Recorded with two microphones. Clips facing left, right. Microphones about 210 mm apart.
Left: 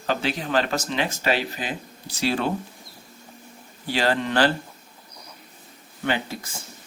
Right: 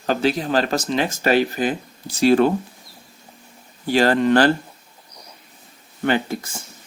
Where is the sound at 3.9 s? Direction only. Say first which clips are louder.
Right 7 dB; 45° right (ahead or behind).